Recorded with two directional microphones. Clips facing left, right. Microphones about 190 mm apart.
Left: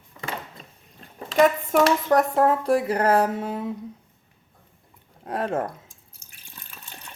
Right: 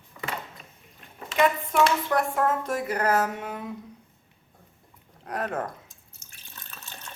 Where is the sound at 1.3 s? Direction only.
40° left (ahead or behind).